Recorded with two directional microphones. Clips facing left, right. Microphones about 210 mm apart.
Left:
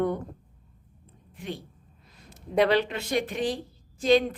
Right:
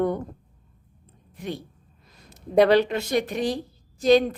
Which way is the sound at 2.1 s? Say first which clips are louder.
Right 6 dB; 40° right (ahead or behind).